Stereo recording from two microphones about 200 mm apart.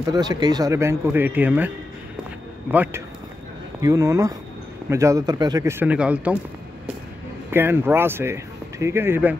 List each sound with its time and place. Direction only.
0.0 s speech: 20° right (ahead or behind)
2.7 s speech: 10° right (ahead or behind)
7.5 s speech: 10° right (ahead or behind)